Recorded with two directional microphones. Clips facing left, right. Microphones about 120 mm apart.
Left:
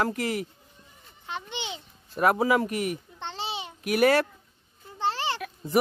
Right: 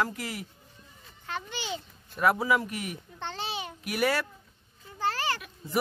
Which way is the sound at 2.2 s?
50° left (ahead or behind).